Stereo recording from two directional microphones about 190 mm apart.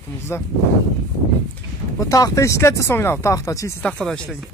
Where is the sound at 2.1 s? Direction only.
15° left (ahead or behind).